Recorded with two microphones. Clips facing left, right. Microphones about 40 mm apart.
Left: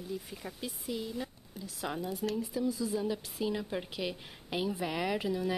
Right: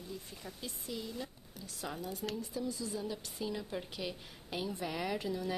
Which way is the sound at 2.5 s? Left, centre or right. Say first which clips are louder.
Left 6 dB; centre.